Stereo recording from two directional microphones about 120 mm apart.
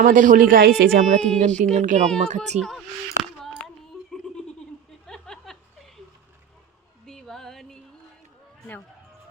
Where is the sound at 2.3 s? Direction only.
70° right (ahead or behind).